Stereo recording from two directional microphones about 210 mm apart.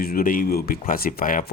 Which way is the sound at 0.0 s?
45° left (ahead or behind).